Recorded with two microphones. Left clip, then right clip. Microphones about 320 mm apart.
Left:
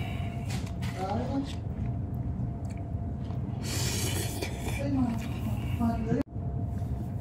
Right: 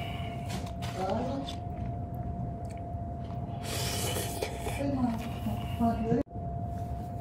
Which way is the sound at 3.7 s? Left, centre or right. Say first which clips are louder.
Even; centre.